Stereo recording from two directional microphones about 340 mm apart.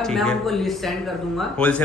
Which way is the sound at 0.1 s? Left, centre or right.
Centre.